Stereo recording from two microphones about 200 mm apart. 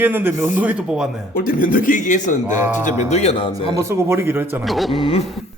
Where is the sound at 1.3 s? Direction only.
45° left (ahead or behind).